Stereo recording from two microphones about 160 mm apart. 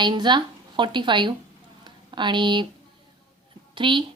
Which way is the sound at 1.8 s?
30° right (ahead or behind).